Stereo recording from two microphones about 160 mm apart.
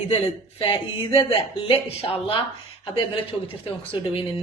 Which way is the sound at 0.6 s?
35° left (ahead or behind).